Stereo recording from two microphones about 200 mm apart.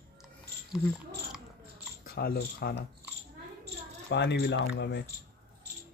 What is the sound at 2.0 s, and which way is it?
Speech, 50° left (ahead or behind).